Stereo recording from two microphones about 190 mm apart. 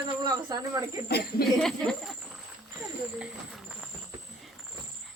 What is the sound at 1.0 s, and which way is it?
Speech, 55° left (ahead or behind).